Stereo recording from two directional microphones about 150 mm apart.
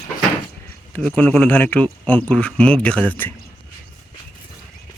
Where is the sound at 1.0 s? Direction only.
10° left (ahead or behind).